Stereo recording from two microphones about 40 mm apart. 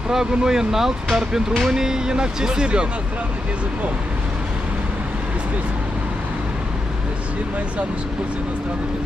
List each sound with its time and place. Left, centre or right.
0.1 s speech: centre